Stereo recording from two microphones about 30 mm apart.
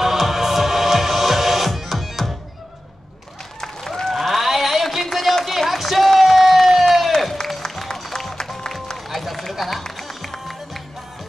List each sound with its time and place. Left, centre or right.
0.0 s music: centre
4.1 s a sound: centre
5.7 s run: centre
7.4 s music: left
9.1 s run: centre
9.9 s music: centre